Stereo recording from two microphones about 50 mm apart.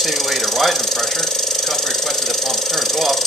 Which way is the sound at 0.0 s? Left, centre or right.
Centre.